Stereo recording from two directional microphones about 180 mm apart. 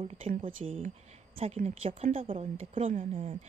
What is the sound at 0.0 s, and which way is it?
A woman's voice, 30° right (ahead or behind).